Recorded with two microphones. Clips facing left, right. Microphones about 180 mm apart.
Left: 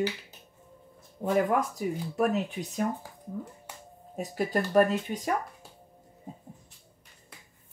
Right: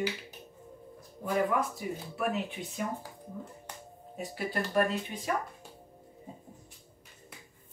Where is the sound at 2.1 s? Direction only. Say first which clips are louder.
Left 5 dB; 40° left (ahead or behind).